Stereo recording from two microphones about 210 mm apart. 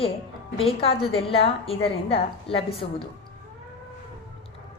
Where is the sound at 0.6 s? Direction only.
25° left (ahead or behind).